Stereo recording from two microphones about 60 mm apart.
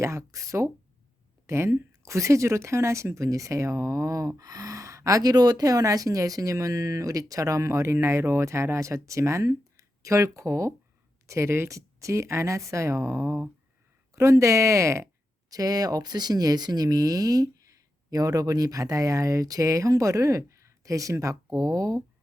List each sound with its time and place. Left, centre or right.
0.0 s speech: right
1.5 s speech: right
7.9 s speech: right
15.4 s speech: right